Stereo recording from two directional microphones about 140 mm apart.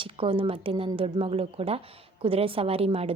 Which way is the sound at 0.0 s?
40° right (ahead or behind).